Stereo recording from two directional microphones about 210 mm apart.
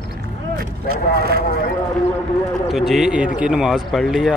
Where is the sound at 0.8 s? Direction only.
50° right (ahead or behind).